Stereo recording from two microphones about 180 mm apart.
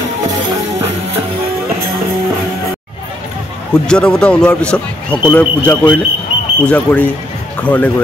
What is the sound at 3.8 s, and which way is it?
Speech, 5° left (ahead or behind).